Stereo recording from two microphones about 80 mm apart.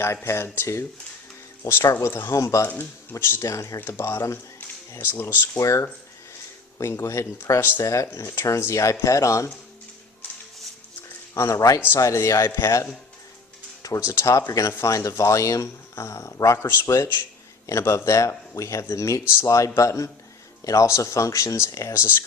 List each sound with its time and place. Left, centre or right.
0.0 s speech: left
2.6 s speech: left
3.8 s speech: left
5.5 s speech: left
11.3 s a man's voice: left
14.1 s a man's voice: left